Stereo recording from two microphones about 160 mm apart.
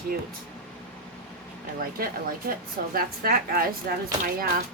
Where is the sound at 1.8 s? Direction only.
65° right (ahead or behind).